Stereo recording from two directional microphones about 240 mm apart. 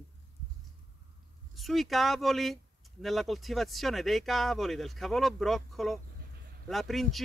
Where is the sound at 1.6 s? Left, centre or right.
Centre.